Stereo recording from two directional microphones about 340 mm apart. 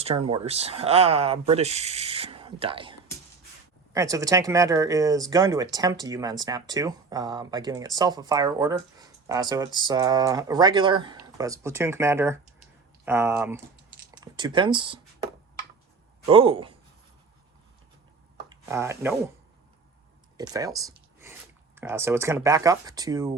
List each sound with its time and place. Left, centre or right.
0.0 s speech: centre
3.9 s speech: centre
16.2 s speech: centre
18.7 s speech: centre
20.3 s a sound: centre
21.8 s speech: centre